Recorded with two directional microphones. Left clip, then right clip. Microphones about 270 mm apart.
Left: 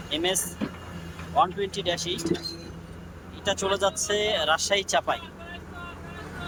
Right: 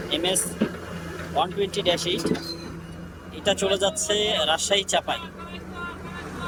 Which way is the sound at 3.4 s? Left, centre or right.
Centre.